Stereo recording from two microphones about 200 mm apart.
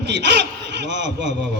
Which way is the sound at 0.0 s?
60° right (ahead or behind).